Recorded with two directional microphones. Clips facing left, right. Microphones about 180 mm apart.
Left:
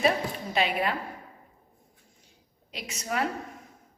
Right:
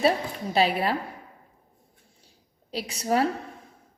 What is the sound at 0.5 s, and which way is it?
Speech, 35° right (ahead or behind).